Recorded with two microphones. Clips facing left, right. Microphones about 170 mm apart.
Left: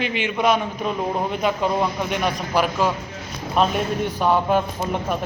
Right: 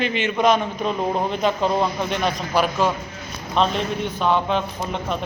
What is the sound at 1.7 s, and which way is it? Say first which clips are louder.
Speech: right 1 dB; 20° right (ahead or behind).